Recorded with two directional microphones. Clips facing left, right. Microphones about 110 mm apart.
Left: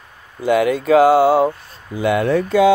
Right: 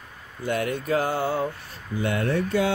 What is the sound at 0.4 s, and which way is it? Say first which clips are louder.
Speech: left 10 dB; 90° left.